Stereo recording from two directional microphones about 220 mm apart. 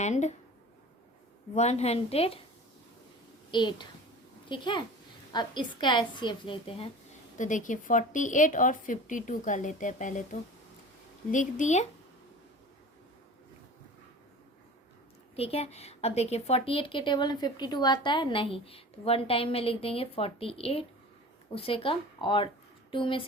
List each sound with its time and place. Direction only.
0.0 s a woman's voice: 30° left (ahead or behind)
1.5 s a woman's voice: 30° left (ahead or behind)
3.5 s a woman's voice: 20° left (ahead or behind)
7.3 s a woman's voice: 35° left (ahead or behind)
11.3 s a woman's voice: 35° left (ahead or behind)
15.4 s a woman's voice: 25° left (ahead or behind)